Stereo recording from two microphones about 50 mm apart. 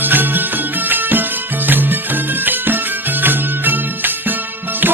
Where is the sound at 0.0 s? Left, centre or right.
Right.